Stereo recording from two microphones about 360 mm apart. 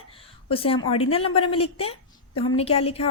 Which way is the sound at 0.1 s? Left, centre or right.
Centre.